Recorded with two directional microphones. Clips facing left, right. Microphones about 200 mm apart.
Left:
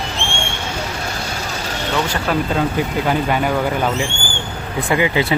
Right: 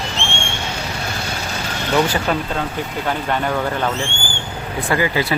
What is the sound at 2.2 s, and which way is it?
Speech, 5° left (ahead or behind).